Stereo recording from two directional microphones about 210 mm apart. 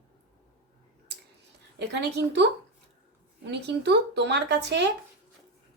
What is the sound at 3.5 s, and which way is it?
Speech, 55° right (ahead or behind).